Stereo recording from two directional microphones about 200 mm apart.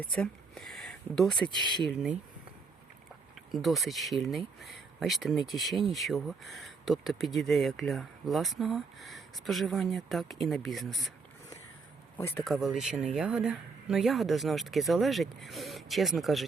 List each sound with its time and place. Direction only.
0.0 s speech: 5° left (ahead or behind)
1.5 s speech: 25° right (ahead or behind)
1.9 s speech: 5° right (ahead or behind)
3.5 s speech: centre (ahead or behind)
12.1 s speech: 10° left (ahead or behind)
12.4 s speech: centre (ahead or behind)